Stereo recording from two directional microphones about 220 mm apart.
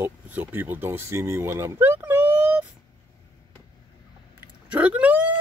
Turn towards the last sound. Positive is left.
turn(degrees=-5)  # may be behind; listen again after turning